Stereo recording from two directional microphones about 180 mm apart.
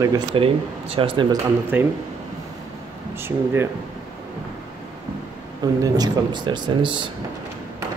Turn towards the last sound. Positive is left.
turn(degrees=-25)  # may be behind; listen again after turning